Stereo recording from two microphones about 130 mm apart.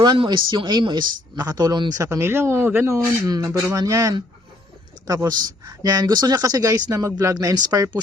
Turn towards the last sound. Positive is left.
turn(degrees=-30)  # may be behind; listen again after turning